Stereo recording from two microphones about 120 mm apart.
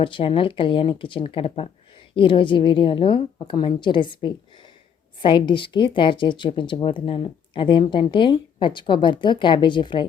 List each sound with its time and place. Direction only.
0.0 s speech: 45° left (ahead or behind)
2.1 s a woman's voice: 45° left (ahead or behind)